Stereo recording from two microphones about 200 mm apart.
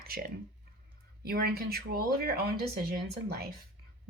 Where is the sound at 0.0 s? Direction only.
50° right (ahead or behind).